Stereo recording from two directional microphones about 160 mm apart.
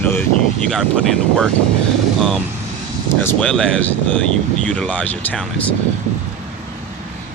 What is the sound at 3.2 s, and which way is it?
Speech, 5° left (ahead or behind).